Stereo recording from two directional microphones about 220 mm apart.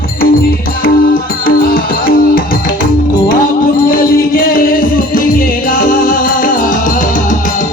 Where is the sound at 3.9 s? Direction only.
40° left (ahead or behind).